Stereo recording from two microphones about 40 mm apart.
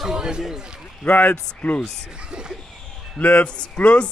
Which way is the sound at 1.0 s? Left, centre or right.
Left.